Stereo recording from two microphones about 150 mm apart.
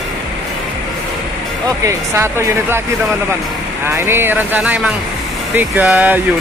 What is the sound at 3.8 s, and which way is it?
Speech, 15° right (ahead or behind).